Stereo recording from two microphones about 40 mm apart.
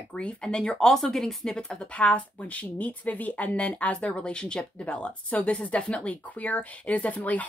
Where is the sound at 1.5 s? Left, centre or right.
Left.